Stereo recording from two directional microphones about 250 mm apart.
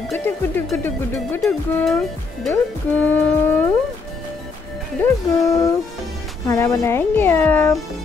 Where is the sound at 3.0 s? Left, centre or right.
Centre.